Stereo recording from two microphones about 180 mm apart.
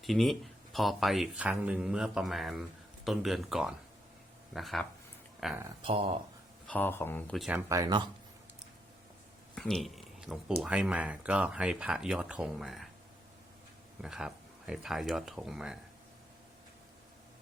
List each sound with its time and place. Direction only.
0.0 s speech: centre (ahead or behind)
5.8 s speech: 30° right (ahead or behind)
6.7 s speech: 10° left (ahead or behind)
7.7 s speech: 20° right (ahead or behind)
9.6 s a sound: centre (ahead or behind)
10.6 s speech: 5° right (ahead or behind)
14.0 s speech: 5° right (ahead or behind)